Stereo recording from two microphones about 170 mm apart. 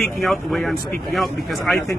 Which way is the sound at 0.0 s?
Centre (ahead or behind).